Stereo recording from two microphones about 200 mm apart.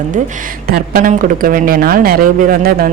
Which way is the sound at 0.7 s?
45° right (ahead or behind).